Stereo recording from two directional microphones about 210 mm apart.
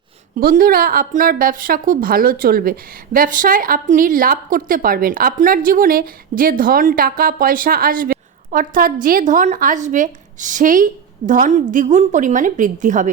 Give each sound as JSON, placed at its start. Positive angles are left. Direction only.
{"t": 0.3, "sound": "a woman's voice", "side_deg": -45}